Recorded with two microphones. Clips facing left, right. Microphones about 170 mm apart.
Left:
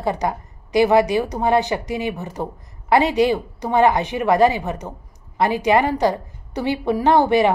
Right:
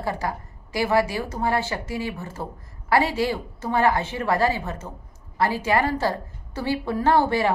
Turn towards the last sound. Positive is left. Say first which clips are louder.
# left 5 dB
turn(degrees=20)  # may be behind; listen again after turning